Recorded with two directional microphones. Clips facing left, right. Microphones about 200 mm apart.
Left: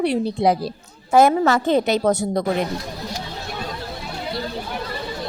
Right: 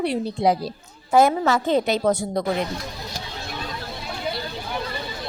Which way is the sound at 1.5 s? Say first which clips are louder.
Left 2 dB; 50° left (ahead or behind).